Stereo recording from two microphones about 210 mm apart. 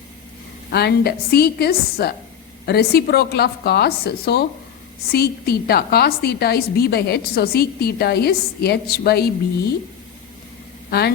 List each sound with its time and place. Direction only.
0.7 s a woman's voice: 50° left (ahead or behind)